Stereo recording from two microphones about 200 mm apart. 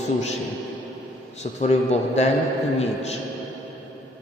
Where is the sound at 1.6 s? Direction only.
35° left (ahead or behind).